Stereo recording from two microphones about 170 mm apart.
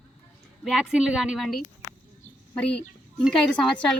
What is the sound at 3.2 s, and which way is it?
Speech, centre (ahead or behind).